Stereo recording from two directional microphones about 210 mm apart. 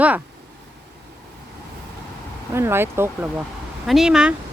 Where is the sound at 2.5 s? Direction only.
10° right (ahead or behind).